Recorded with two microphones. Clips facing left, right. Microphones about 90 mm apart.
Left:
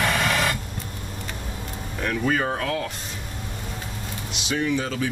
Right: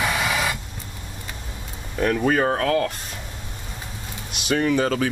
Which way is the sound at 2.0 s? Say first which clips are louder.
Right 4 dB; 40° right (ahead or behind).